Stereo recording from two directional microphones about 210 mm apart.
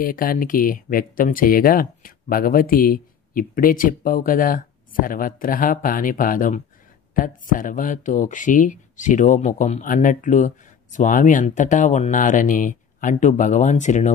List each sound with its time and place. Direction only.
0.0 s speech: 40° left (ahead or behind)